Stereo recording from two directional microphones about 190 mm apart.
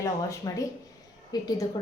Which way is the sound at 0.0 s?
15° left (ahead or behind).